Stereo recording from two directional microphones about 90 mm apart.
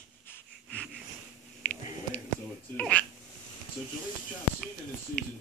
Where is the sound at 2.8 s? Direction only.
15° left (ahead or behind).